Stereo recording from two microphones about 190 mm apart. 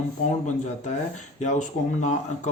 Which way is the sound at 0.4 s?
40° left (ahead or behind).